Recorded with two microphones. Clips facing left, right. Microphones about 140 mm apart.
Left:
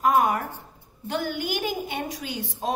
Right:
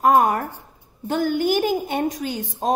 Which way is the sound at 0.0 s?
45° right (ahead or behind).